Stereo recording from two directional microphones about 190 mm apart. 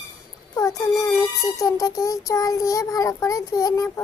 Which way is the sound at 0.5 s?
15° left (ahead or behind).